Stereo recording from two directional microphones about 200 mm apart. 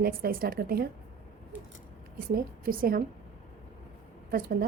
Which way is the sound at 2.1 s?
45° right (ahead or behind).